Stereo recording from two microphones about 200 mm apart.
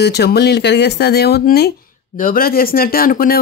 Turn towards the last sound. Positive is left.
turn(degrees=45)  # may be behind; listen again after turning